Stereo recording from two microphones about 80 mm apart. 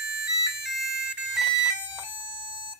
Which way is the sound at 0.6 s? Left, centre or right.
Centre.